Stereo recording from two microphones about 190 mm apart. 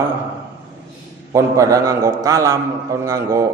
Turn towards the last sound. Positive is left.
turn(degrees=-15)  # may be behind; listen again after turning